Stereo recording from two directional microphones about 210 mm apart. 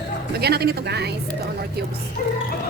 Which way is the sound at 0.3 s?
50° right (ahead or behind).